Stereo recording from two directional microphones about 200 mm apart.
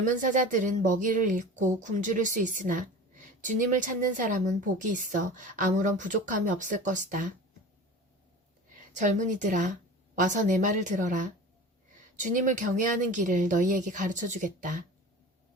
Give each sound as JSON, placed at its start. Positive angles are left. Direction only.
{"t": 0.0, "sound": "a woman's voice", "side_deg": -40}
{"t": 8.9, "sound": "a woman's voice", "side_deg": -40}